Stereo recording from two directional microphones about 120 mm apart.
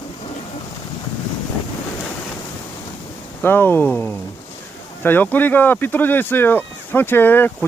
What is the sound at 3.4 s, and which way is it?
Speech, 15° left (ahead or behind).